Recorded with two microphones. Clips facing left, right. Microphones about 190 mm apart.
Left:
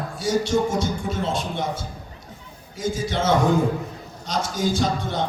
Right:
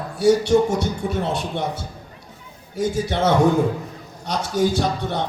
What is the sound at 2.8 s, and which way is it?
Speech, 60° right (ahead or behind).